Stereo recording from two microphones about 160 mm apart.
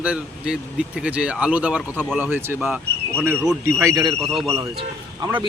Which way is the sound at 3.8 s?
20° right (ahead or behind).